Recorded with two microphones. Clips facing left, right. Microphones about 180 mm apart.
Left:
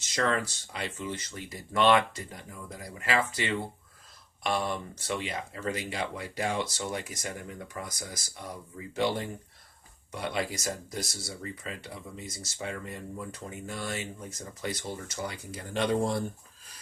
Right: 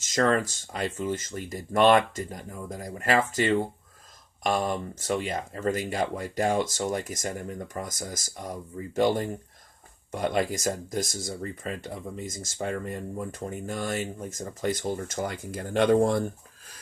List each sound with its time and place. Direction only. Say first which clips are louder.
0.0 s speech: right 5 dB; 45° right (ahead or behind)